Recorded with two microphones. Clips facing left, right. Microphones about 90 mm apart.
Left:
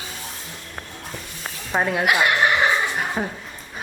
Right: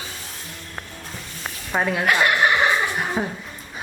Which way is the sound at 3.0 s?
Centre (ahead or behind).